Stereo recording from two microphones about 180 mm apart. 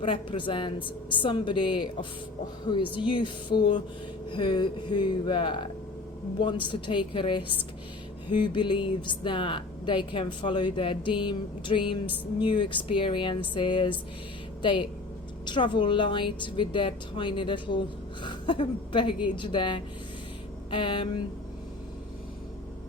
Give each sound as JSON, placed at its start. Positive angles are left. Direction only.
{"t": 0.0, "sound": "a woman's voice", "side_deg": 30}